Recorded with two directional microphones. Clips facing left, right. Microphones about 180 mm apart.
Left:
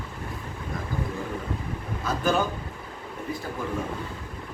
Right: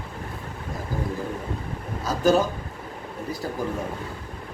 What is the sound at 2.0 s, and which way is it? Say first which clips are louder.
Speech: right 5 dB; 40° right (ahead or behind).